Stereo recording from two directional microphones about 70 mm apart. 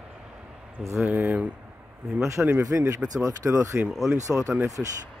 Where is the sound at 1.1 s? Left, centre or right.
Right.